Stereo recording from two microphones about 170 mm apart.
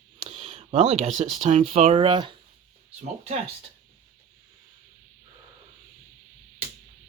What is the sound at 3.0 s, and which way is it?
Speech, 40° right (ahead or behind).